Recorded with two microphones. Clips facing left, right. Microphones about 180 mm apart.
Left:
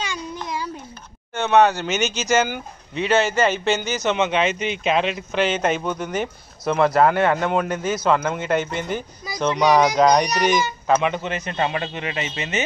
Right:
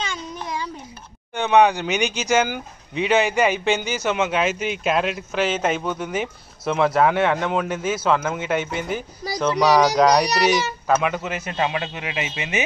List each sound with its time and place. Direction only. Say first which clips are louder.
1.3 s speech: even; 15° right (ahead or behind)